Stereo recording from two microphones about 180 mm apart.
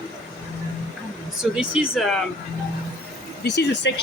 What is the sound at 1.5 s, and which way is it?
Speech, 5° right (ahead or behind).